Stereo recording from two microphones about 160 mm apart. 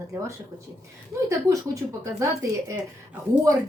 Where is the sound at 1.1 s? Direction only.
20° right (ahead or behind).